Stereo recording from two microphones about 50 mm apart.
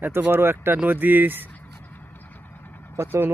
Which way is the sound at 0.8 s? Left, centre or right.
Right.